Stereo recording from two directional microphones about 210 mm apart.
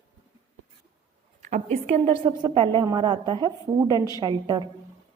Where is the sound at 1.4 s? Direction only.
35° right (ahead or behind); by 4.6 s 20° right (ahead or behind).